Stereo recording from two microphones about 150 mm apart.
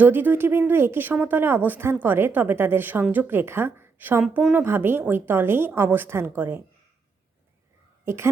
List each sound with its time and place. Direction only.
0.0 s a woman's voice: 10° right (ahead or behind)
8.0 s a woman's voice: 15° right (ahead or behind)